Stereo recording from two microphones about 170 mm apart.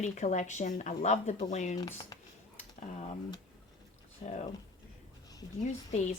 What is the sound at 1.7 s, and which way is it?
Speech, 25° left (ahead or behind).